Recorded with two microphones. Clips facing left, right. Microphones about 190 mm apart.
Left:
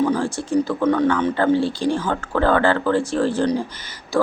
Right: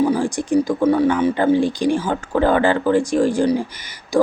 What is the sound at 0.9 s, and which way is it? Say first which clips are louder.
Speech: right 2 dB; 10° right (ahead or behind).